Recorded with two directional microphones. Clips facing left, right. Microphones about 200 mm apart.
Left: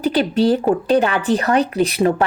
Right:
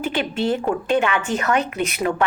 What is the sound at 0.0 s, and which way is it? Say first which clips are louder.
A woman's voice: left 7 dB; 35° left (ahead or behind).